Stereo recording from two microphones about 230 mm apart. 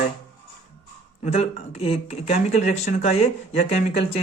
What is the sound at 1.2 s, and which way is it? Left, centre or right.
Speech, left.